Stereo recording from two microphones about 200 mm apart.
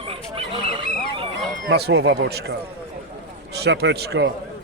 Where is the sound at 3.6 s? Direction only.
60° right (ahead or behind).